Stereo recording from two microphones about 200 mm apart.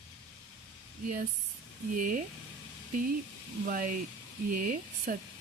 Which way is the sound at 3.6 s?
45° right (ahead or behind).